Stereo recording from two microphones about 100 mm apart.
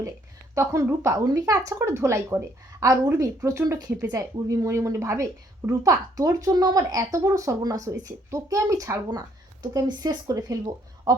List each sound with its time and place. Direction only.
0.5 s a woman's voice: 30° right (ahead or behind)
1.2 s a woman's voice: 40° right (ahead or behind)
1.8 s a woman's voice: 25° right (ahead or behind)